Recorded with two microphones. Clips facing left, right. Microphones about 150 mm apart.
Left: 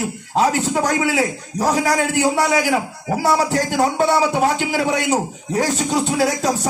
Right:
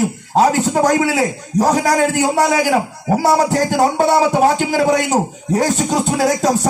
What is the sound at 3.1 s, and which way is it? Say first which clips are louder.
A man's voice: right 4 dB; 40° right (ahead or behind).